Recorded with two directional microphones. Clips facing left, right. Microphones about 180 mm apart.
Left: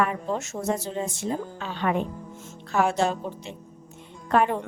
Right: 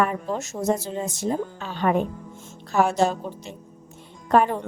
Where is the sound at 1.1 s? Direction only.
40° right (ahead or behind).